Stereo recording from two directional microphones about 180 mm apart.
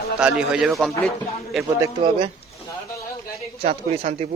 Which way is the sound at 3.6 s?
35° right (ahead or behind).